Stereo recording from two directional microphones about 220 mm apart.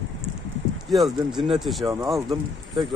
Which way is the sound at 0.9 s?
Centre (ahead or behind).